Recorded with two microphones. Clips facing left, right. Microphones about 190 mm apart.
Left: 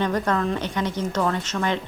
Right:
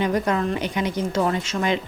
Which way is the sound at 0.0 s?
10° right (ahead or behind).